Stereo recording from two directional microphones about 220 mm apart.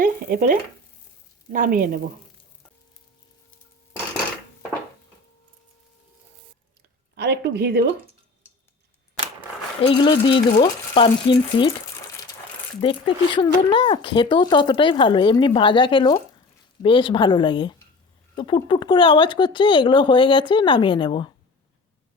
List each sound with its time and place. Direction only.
0.0 s stir: 40° right (ahead or behind)
1.5 s stir: 40° right (ahead or behind)
7.2 s speech: 50° right (ahead or behind)
9.8 s speech: 25° left (ahead or behind)
12.8 s speech: 20° left (ahead or behind)